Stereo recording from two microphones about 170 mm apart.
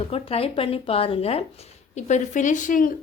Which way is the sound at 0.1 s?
35° left (ahead or behind).